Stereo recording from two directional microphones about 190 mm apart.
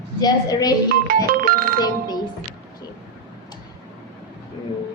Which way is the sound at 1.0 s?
50° right (ahead or behind).